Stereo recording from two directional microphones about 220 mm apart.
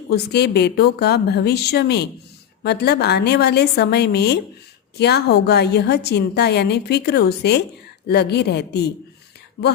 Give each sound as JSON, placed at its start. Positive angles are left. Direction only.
{"t": 0.1, "sound": "a woman's voice", "side_deg": 50}